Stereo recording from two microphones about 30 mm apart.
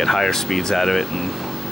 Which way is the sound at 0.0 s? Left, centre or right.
Centre.